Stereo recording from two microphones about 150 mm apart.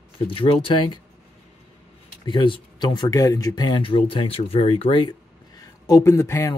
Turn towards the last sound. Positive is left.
turn(degrees=20)  # may be behind; listen again after turning